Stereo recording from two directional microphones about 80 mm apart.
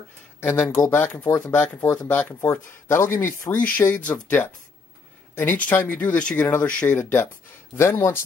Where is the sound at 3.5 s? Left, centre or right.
Centre.